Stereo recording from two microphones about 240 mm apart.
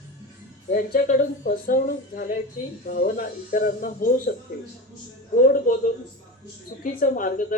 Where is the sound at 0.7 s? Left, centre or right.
Left.